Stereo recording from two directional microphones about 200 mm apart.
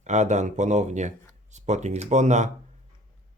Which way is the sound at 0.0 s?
35° right (ahead or behind).